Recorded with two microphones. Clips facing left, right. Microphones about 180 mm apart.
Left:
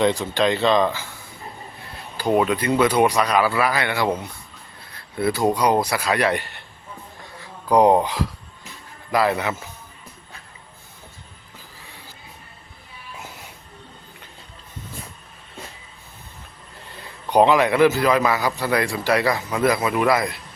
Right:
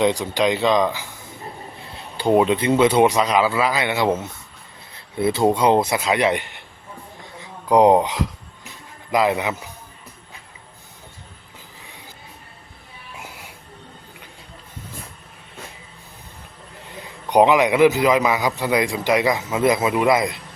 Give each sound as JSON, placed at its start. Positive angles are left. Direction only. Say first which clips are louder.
{"t": 0.0, "sound": "a man's voice", "louder": "right 1 dB", "side_deg": -15}
{"t": 13.1, "sound": "a sound", "louder": "right 1 dB", "side_deg": -10}
{"t": 16.9, "sound": "a man's voice", "louder": "right 1 dB", "side_deg": -15}